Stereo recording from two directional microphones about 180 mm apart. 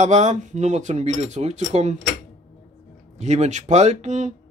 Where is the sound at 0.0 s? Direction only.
40° right (ahead or behind).